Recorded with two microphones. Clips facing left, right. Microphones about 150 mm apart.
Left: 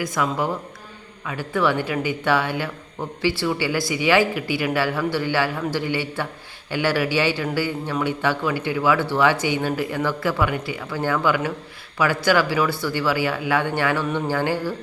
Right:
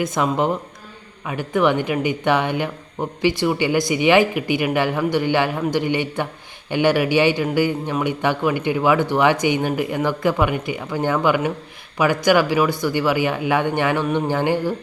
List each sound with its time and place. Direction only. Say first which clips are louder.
0.0 s speech: right 4 dB; 20° right (ahead or behind)